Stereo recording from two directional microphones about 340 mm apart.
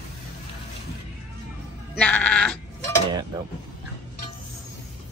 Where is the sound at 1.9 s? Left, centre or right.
Centre.